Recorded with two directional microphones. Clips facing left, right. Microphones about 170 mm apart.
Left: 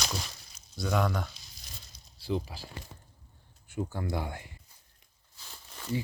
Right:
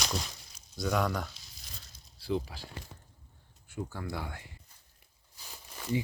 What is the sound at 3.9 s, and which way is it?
Speech, 20° left (ahead or behind).